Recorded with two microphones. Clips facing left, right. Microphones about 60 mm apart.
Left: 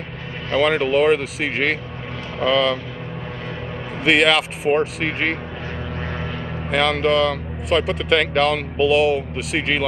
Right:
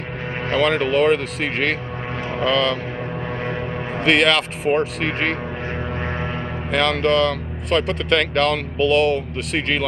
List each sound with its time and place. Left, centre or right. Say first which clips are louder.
0.6 s speech: left 1 dB; centre
4.0 s speech: left 1 dB; centre
5.9 s a sound: right 3 dB; right
6.7 s speech: even; centre